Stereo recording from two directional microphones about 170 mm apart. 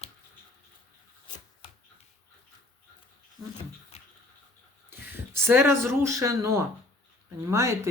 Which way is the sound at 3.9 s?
40° left (ahead or behind).